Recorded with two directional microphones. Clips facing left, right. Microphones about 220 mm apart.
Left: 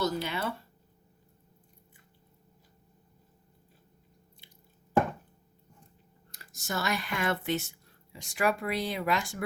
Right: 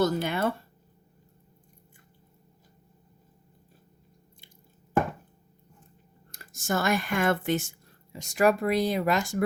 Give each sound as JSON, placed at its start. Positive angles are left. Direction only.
{"t": 0.0, "sound": "speech", "side_deg": -50}
{"t": 6.3, "sound": "speech", "side_deg": -50}